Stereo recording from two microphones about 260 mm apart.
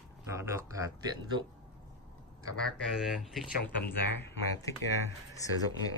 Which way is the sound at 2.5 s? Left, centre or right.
Centre.